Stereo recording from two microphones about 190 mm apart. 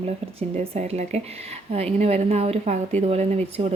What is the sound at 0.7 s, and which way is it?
A woman's voice, 35° right (ahead or behind).